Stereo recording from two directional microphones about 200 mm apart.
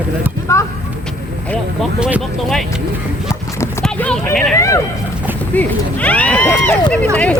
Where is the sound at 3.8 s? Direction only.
5° left (ahead or behind).